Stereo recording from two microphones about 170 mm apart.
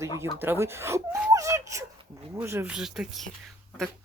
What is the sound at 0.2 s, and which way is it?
Speech, 15° right (ahead or behind).